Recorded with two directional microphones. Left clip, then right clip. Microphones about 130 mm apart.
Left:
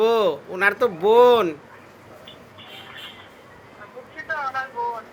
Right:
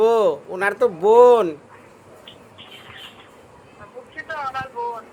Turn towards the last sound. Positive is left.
turn(degrees=-15)  # may be behind; listen again after turning